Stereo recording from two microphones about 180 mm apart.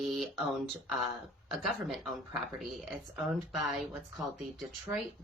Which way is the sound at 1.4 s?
Centre (ahead or behind).